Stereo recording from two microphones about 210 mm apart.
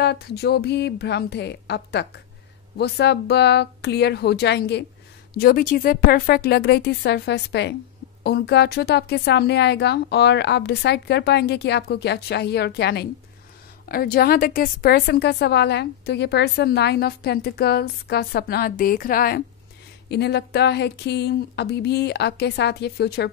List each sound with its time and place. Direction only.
0.0 s a woman's voice: 50° left (ahead or behind)